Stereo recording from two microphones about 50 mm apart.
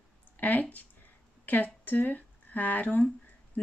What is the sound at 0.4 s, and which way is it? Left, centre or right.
Speech, left.